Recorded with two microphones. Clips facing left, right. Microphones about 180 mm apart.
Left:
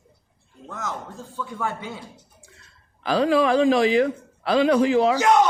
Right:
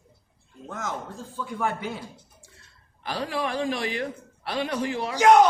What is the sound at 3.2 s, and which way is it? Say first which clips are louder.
Speech: left 10 dB; 90° left.